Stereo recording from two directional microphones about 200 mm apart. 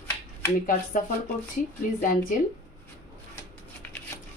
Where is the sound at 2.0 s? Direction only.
40° left (ahead or behind).